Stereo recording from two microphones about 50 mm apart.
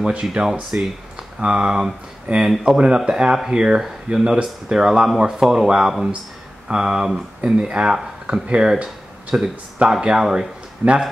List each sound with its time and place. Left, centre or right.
0.3 s speech: centre